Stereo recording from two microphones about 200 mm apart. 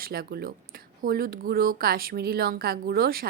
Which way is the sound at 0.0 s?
50° right (ahead or behind).